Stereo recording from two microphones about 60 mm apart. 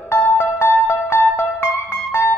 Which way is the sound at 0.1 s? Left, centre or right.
Left.